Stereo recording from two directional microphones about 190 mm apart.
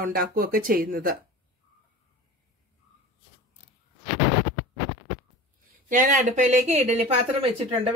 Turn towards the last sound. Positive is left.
turn(degrees=-30)  # may be behind; listen again after turning